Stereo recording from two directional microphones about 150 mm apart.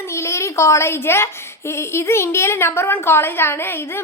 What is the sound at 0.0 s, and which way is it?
A woman's voice, 20° left (ahead or behind).